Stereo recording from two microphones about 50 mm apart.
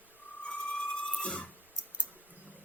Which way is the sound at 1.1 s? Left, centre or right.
Left.